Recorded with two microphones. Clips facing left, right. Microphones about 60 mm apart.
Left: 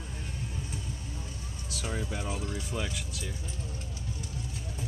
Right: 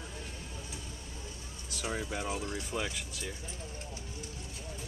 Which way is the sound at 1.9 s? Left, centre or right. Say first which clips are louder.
Even; centre.